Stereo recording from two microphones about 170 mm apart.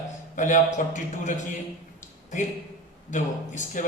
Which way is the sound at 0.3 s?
50° left (ahead or behind).